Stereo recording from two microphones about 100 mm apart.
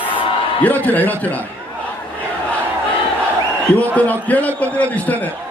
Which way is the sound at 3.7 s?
15° left (ahead or behind).